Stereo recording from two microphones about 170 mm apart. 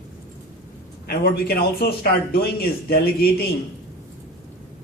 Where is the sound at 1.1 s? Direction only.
65° left (ahead or behind).